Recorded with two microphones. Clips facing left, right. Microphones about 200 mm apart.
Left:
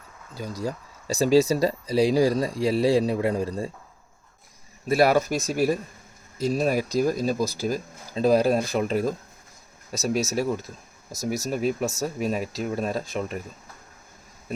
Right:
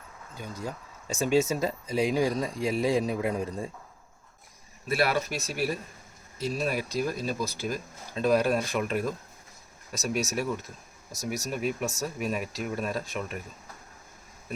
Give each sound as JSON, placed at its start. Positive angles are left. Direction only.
{"t": 0.3, "sound": "speech", "side_deg": 35}
{"t": 4.9, "sound": "speech", "side_deg": 40}